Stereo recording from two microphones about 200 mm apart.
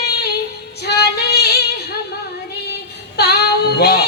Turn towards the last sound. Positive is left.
turn(degrees=55)  # may be behind; listen again after turning